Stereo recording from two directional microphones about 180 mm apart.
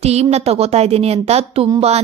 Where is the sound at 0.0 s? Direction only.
35° right (ahead or behind).